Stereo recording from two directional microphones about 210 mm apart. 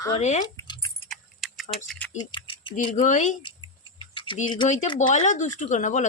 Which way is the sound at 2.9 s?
35° left (ahead or behind).